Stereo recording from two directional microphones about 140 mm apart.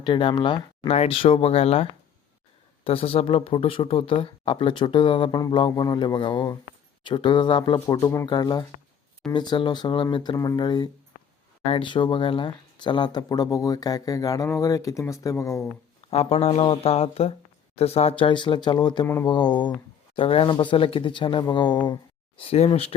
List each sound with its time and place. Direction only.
0.0 s speech: 35° left (ahead or behind)
7.9 s speech: 20° left (ahead or behind)
16.0 s speech: 50° left (ahead or behind); by 21.9 s 30° left (ahead or behind)
22.4 s speech: 45° left (ahead or behind)